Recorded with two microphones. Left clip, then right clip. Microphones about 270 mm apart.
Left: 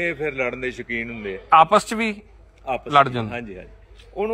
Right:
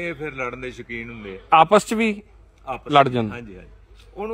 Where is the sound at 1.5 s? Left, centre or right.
Right.